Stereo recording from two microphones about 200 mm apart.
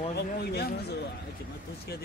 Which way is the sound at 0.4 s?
55° left (ahead or behind).